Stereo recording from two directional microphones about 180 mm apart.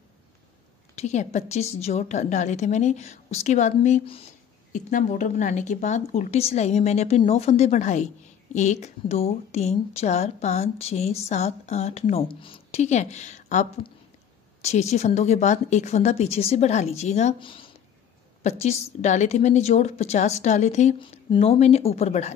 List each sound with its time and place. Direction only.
0.9 s a woman's voice: 40° left (ahead or behind)